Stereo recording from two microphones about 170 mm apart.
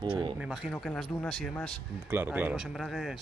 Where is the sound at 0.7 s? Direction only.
5° left (ahead or behind).